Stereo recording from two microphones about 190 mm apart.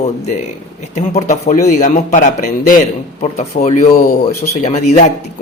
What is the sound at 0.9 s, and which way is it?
Speech, 35° left (ahead or behind).